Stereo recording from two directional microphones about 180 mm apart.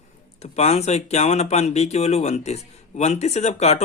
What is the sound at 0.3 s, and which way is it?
Speech, 40° left (ahead or behind).